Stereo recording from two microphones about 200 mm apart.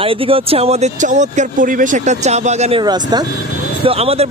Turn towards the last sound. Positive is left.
turn(degrees=-30)  # may be behind; listen again after turning